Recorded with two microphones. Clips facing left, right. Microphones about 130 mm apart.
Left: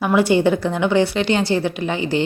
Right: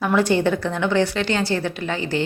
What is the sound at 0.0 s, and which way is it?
A woman's voice, 10° left (ahead or behind).